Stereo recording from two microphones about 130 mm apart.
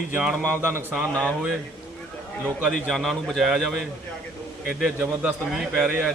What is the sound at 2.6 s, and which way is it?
A man's voice, centre (ahead or behind).